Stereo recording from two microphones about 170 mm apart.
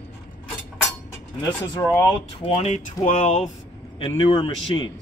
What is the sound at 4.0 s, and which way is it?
Speech, 30° left (ahead or behind).